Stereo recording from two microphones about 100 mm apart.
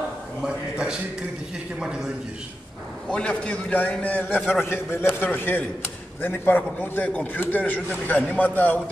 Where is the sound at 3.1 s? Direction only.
10° left (ahead or behind).